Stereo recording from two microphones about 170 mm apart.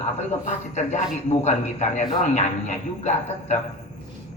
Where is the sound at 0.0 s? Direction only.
45° left (ahead or behind).